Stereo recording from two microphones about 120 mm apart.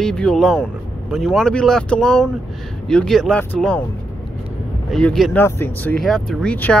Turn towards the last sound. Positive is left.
turn(degrees=10)  # may be behind; listen again after turning